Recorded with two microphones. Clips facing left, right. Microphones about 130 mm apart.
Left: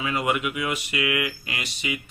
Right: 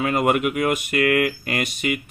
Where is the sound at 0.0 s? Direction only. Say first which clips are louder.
Right 6 dB; 50° right (ahead or behind).